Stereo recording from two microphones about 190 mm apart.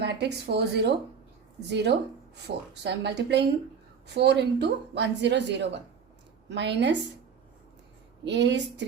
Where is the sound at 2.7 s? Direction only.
60° right (ahead or behind).